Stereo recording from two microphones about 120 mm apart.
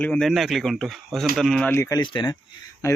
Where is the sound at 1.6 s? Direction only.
20° left (ahead or behind).